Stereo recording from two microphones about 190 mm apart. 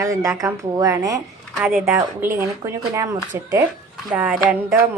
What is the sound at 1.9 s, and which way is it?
Speech, 15° right (ahead or behind).